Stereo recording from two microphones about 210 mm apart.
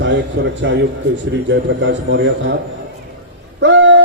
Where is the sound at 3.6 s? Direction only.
60° right (ahead or behind).